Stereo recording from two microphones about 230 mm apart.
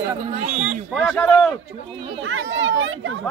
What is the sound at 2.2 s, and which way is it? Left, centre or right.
Speech, right.